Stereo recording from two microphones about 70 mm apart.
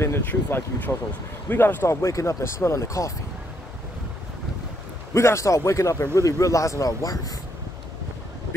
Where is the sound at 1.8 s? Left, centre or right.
Left.